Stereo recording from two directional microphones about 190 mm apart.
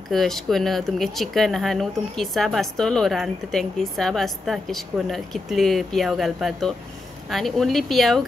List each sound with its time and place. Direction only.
0.1 s speech: centre (ahead or behind)